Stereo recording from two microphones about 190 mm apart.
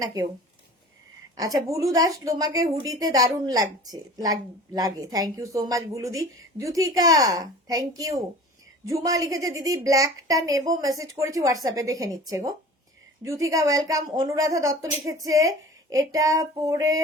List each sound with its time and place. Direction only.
0.0 s a woman's voice: 15° right (ahead or behind)
1.4 s a woman's voice: 20° right (ahead or behind)